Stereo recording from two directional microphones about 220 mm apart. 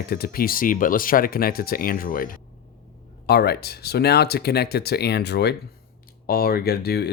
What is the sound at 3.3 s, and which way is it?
Speech, 45° left (ahead or behind).